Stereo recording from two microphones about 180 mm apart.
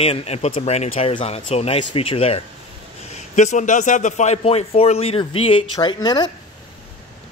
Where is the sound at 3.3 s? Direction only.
40° left (ahead or behind); by 6.3 s 25° left (ahead or behind).